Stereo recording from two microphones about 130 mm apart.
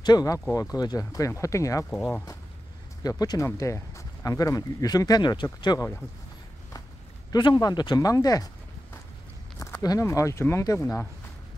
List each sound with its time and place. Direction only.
0.0 s speech: 30° left (ahead or behind)
1.9 s speech: 5° left (ahead or behind)
3.0 s speech: 30° left (ahead or behind)
7.3 s speech: 30° left (ahead or behind)
9.6 s speech: 25° left (ahead or behind)